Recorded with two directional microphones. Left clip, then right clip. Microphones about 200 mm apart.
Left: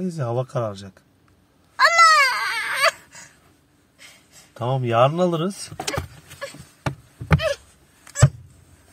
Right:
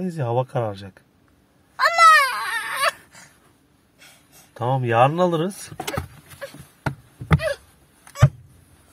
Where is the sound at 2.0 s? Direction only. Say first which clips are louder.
Right 3 dB; centre (ahead or behind).